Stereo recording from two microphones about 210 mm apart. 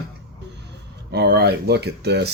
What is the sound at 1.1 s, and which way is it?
Speech, 50° right (ahead or behind).